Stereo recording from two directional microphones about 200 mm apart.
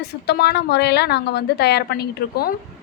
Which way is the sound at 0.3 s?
55° left (ahead or behind).